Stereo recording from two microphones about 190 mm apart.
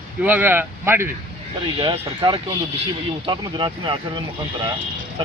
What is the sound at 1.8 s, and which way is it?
Speech, 30° right (ahead or behind).